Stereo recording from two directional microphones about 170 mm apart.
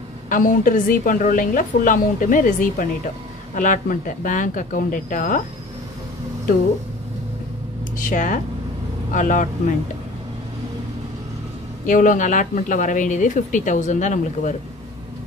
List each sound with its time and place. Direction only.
0.3 s speech: 50° left (ahead or behind)
8.1 s speech: 50° left (ahead or behind)
11.8 s speech: 50° left (ahead or behind)